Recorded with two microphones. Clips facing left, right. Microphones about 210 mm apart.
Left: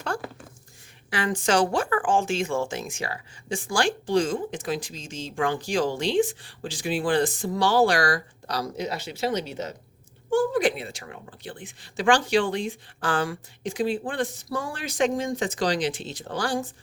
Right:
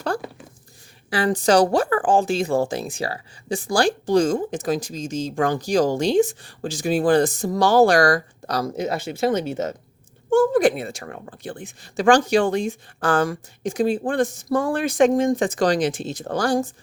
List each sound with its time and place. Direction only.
1.1 s a woman's voice: 35° right (ahead or behind)